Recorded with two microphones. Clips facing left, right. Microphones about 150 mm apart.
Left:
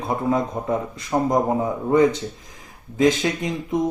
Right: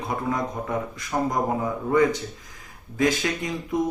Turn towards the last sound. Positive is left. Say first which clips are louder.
# left 3 dB
turn(degrees=20)  # may be behind; listen again after turning